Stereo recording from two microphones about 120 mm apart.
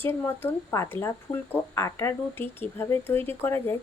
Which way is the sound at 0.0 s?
20° left (ahead or behind).